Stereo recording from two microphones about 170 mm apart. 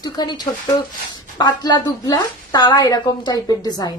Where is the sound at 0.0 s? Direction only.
25° left (ahead or behind).